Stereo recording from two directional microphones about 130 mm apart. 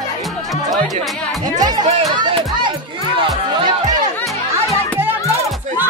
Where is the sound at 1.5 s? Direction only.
30° right (ahead or behind).